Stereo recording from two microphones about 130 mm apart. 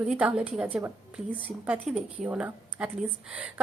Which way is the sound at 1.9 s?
10° right (ahead or behind).